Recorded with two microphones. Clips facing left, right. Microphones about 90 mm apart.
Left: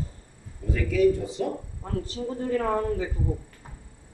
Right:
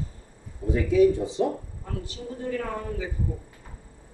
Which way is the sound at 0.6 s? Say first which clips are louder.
Right 2 dB; 20° right (ahead or behind).